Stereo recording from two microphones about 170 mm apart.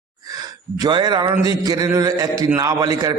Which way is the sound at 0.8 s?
25° right (ahead or behind).